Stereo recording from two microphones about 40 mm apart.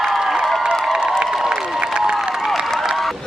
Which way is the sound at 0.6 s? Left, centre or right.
Right.